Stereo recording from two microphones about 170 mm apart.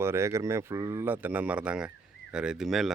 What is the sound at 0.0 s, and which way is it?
Speech, 15° right (ahead or behind).